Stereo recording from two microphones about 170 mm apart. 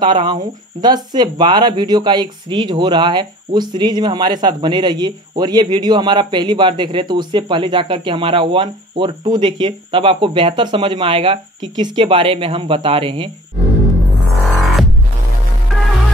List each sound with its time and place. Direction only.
0.0 s speech: 25° right (ahead or behind)
14.6 s music: centre (ahead or behind)